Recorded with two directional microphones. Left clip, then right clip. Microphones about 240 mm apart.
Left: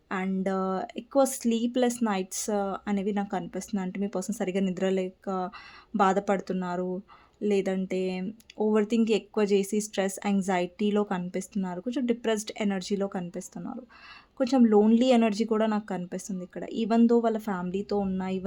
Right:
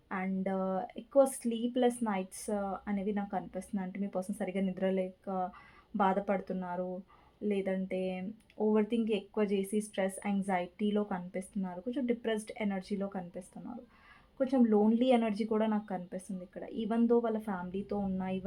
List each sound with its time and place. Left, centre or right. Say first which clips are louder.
0.1 s speech: left 6 dB; left